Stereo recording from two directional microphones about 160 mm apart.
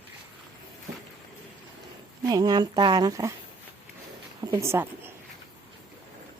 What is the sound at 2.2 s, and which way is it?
Speech, 25° right (ahead or behind).